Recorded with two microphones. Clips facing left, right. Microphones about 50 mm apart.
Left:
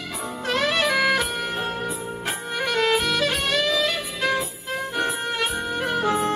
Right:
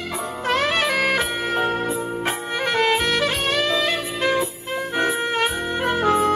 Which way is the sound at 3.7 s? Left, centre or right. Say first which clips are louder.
Right 2 dB; right.